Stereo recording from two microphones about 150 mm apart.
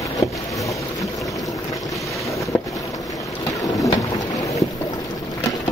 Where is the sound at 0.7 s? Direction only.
20° left (ahead or behind).